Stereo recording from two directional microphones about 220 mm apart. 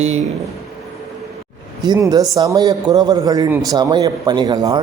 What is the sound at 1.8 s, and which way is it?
A man's voice, 15° right (ahead or behind).